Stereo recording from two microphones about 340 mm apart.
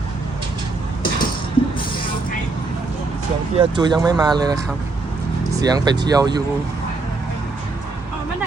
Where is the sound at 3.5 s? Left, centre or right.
Centre.